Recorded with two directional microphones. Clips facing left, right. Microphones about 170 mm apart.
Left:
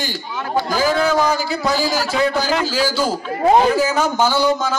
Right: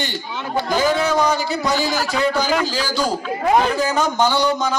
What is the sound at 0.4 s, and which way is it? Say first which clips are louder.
Speech: left 1 dB; 20° right (ahead or behind).